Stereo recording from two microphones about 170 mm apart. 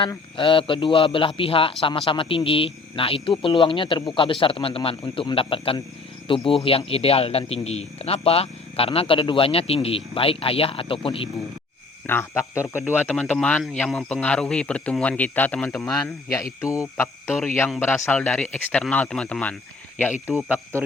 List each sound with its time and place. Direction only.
0.0 s speech: 30° left (ahead or behind)
12.0 s speech: 15° left (ahead or behind)
16.3 s speech: 15° left (ahead or behind)
17.9 s speech: centre (ahead or behind)